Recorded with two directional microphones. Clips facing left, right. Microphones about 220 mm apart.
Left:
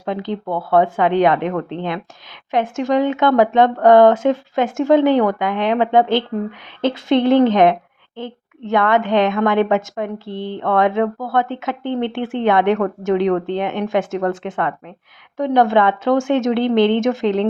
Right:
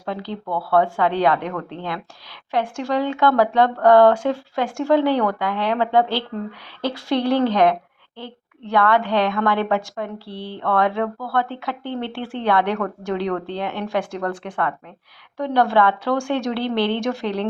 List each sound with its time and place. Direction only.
0.0 s a woman's voice: 20° left (ahead or behind)